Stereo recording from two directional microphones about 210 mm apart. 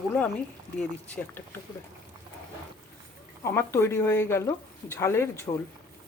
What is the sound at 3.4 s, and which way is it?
Speech, 10° left (ahead or behind).